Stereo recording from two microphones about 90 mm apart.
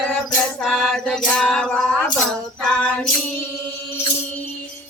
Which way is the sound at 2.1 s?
5° left (ahead or behind).